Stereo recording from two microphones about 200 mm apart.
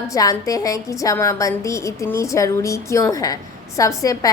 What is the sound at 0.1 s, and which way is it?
A woman's voice, 15° left (ahead or behind).